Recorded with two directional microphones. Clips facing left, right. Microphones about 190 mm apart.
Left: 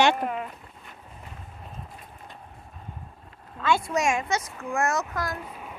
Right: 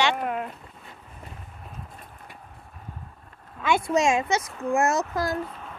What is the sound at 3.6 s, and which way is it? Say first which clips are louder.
A child's voice: right 2 dB; 20° right (ahead or behind).